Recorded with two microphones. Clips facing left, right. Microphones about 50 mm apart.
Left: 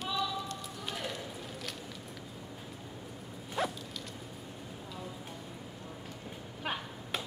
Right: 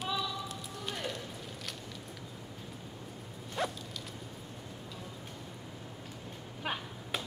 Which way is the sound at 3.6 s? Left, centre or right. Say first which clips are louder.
Left 1 dB; centre.